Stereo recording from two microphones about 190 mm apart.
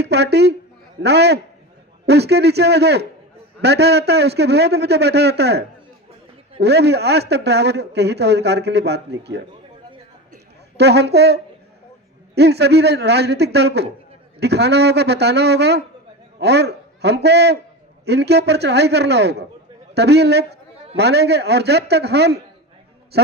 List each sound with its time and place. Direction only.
0.0 s speech: 60° right (ahead or behind)
10.8 s a man's voice: 60° right (ahead or behind)